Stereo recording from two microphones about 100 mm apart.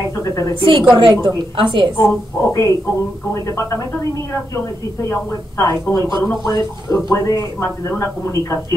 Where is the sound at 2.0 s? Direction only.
30° left (ahead or behind).